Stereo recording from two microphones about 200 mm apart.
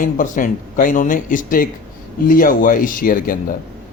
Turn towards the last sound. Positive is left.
turn(degrees=45)  # may be behind; listen again after turning